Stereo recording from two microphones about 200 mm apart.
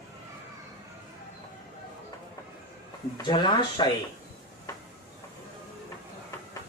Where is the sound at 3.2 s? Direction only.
20° left (ahead or behind).